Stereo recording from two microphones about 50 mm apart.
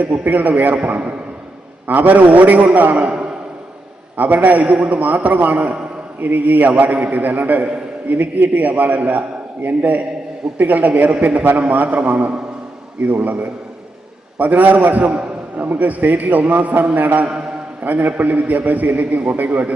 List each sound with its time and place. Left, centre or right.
0.0 s a man's voice: right